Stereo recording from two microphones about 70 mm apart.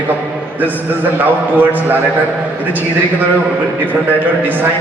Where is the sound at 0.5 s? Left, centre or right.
Right.